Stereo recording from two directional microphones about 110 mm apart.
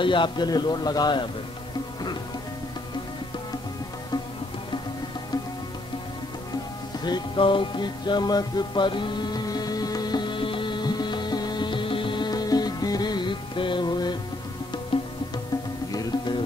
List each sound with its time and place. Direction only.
0.0 s a man's voice: 45° left (ahead or behind)
7.1 s music: 45° left (ahead or behind)
15.9 s music: 35° left (ahead or behind)